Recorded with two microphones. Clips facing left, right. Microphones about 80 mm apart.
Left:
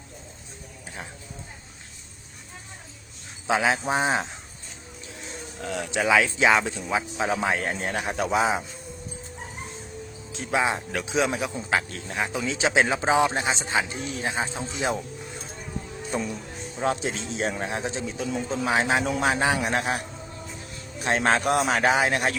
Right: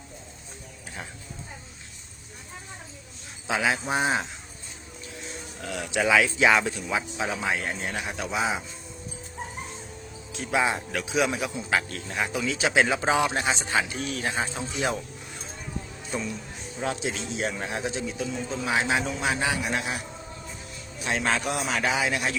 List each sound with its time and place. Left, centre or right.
3.4 s speech: left
5.5 s a man's voice: left
10.3 s speech: left
16.1 s a man's voice: left
21.0 s speech: left